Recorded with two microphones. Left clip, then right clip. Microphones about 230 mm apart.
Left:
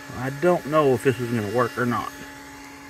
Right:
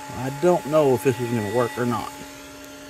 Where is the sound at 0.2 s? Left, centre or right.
Centre.